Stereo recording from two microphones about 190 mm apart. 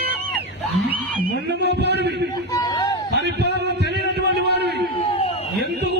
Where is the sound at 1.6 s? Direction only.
60° right (ahead or behind).